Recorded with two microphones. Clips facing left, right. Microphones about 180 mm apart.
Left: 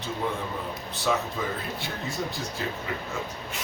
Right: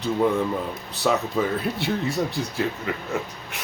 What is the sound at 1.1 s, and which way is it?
Speech, 60° right (ahead or behind).